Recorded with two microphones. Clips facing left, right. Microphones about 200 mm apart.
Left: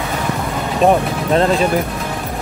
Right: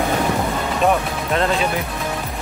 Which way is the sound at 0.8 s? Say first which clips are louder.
Left 6 dB; 35° left (ahead or behind).